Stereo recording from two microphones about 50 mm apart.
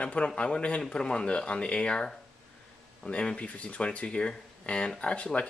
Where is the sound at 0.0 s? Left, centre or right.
Left.